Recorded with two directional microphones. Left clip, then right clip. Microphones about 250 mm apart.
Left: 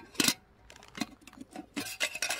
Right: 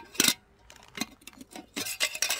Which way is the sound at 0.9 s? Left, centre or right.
Centre.